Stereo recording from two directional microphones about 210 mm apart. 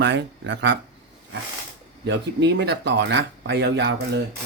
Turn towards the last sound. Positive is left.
turn(degrees=-55)  # may be behind; listen again after turning